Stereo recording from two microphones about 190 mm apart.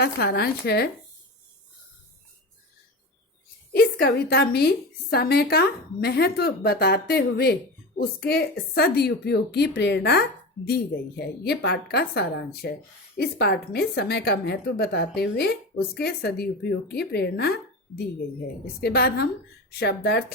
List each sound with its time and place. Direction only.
0.0 s a woman's voice: 55° left (ahead or behind)
3.7 s a woman's voice: 55° left (ahead or behind)